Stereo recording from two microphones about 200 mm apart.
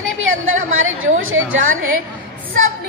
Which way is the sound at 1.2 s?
80° right.